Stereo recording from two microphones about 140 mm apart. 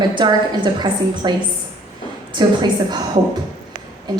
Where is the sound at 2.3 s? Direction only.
30° right (ahead or behind).